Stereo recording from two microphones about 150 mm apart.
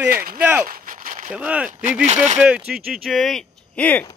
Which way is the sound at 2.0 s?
50° right (ahead or behind).